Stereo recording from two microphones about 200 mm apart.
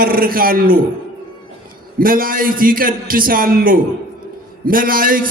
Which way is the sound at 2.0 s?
45° right (ahead or behind).